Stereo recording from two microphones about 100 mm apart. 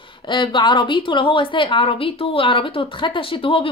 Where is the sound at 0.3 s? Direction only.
55° left (ahead or behind).